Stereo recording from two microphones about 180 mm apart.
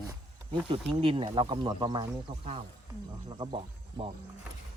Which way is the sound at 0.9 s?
30° right (ahead or behind).